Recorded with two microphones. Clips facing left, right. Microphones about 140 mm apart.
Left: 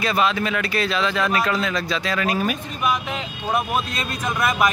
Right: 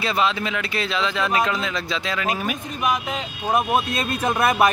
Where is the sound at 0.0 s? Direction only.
20° right (ahead or behind).